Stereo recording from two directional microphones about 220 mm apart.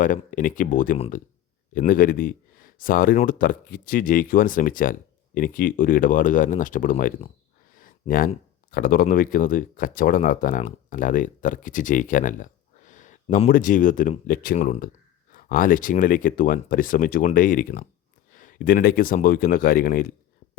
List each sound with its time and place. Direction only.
0.0 s speech: 35° left (ahead or behind)